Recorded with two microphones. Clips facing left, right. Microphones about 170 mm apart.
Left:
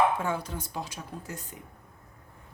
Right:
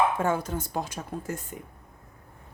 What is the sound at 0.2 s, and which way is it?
Speech, 45° right (ahead or behind).